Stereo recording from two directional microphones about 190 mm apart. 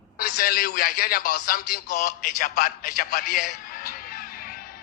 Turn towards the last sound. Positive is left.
turn(degrees=50)  # may be behind; listen again after turning